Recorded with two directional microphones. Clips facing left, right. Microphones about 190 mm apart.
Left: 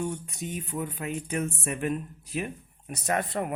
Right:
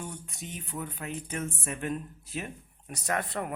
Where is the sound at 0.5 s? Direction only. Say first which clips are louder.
Left 4 dB; 15° left (ahead or behind).